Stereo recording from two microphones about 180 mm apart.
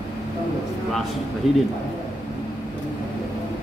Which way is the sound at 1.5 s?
Centre (ahead or behind).